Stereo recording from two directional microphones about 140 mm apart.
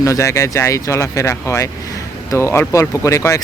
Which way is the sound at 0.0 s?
20° left (ahead or behind).